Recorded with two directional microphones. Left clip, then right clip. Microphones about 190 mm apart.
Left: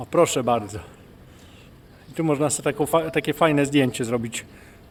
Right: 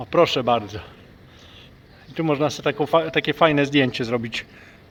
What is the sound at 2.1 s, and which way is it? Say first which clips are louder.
A man's voice: right 1 dB; 5° left (ahead or behind).